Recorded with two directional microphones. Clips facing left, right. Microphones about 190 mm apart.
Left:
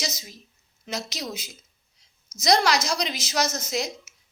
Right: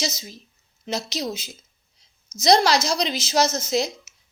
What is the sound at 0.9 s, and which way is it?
A woman's voice, 25° right (ahead or behind).